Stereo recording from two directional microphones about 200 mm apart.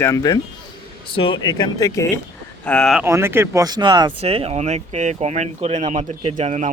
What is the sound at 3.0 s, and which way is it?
Speech, 10° right (ahead or behind).